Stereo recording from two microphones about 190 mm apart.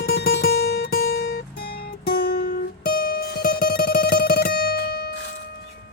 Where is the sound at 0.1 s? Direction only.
60° left (ahead or behind).